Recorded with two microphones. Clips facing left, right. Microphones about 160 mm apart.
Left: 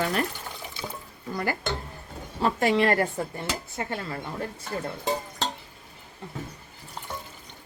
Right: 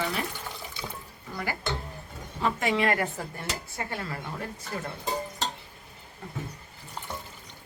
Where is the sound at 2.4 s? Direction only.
35° left (ahead or behind).